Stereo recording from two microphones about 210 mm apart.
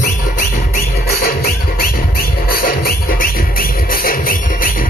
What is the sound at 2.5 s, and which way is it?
Music, 45° left (ahead or behind).